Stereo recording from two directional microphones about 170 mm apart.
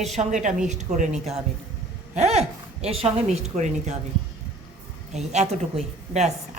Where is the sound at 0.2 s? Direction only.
45° right (ahead or behind).